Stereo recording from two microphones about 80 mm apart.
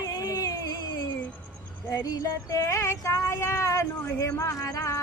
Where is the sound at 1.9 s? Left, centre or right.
Left.